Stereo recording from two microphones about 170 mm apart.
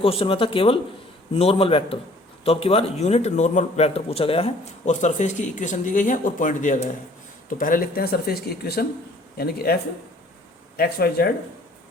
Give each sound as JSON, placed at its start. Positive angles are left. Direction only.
{"t": 0.0, "sound": "a man's voice", "side_deg": 35}